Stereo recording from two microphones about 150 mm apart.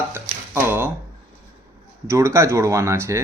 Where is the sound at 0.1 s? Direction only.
15° right (ahead or behind).